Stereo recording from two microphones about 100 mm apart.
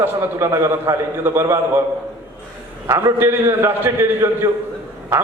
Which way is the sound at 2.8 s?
30° right (ahead or behind).